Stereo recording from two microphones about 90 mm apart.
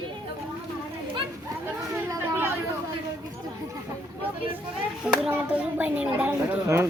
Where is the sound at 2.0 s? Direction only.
25° right (ahead or behind).